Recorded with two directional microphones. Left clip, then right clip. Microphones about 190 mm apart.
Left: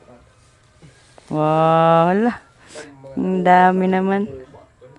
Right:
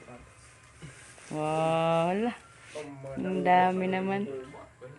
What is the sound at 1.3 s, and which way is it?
Speech, 40° left (ahead or behind).